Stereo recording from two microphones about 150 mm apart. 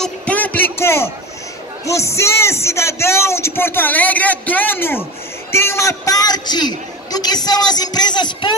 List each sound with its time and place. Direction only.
0.0 s music: 10° left (ahead or behind)
1.9 s a man's voice: 20° left (ahead or behind)